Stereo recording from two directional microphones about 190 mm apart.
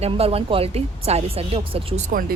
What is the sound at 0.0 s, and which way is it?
A woman's voice, 30° right (ahead or behind).